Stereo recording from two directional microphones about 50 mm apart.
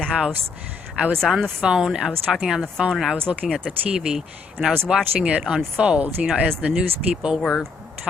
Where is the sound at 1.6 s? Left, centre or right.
Centre.